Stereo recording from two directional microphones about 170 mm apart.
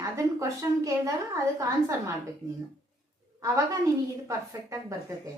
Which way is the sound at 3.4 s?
20° right (ahead or behind).